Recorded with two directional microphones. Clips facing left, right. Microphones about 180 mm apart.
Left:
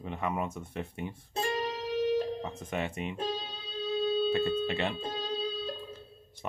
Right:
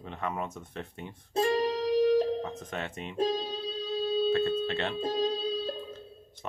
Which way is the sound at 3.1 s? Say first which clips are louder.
Right 6 dB; 35° right (ahead or behind).